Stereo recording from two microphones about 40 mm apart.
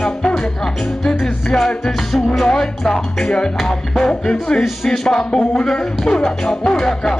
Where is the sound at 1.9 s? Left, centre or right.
Centre.